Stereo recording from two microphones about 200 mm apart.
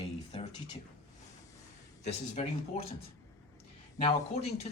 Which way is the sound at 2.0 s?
30° left (ahead or behind).